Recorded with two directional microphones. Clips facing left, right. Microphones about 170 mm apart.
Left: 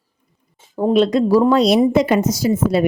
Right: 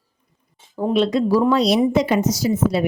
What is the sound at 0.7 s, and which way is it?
A woman's voice, 45° left (ahead or behind).